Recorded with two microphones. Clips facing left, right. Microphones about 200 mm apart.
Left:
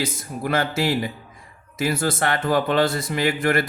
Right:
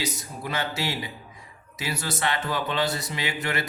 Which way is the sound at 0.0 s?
50° left (ahead or behind).